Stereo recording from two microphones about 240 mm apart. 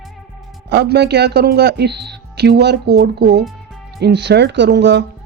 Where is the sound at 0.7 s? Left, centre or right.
Right.